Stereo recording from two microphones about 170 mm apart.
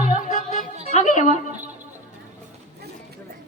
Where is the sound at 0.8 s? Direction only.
45° left (ahead or behind).